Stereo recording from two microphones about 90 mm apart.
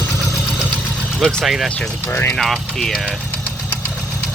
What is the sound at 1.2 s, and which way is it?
Speech, centre (ahead or behind).